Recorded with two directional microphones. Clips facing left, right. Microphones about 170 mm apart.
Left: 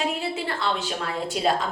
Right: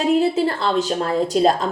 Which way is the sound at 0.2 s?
40° right (ahead or behind).